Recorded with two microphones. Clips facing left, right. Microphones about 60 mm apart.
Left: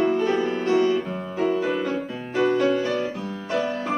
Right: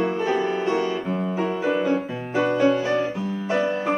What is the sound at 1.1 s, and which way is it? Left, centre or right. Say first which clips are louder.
Music: even; centre.